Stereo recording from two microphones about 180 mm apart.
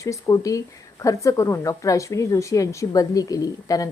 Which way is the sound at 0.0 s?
20° left (ahead or behind).